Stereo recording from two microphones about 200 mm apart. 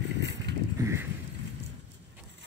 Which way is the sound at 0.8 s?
15° right (ahead or behind).